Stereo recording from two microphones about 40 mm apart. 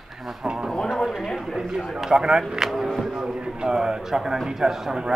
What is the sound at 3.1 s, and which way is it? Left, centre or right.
A man's voice, centre.